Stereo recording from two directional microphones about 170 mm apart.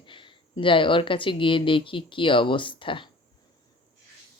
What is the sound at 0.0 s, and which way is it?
Speech, 30° left (ahead or behind).